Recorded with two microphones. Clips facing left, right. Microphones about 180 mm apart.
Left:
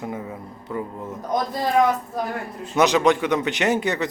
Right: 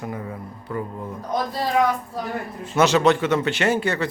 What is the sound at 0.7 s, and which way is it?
Speech, 10° left (ahead or behind).